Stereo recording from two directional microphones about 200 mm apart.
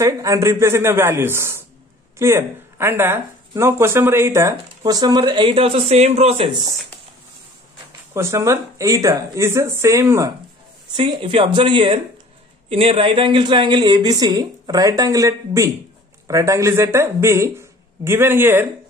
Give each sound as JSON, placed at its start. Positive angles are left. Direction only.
{"t": 0.0, "sound": "speech", "side_deg": -15}
{"t": 8.1, "sound": "speech", "side_deg": -15}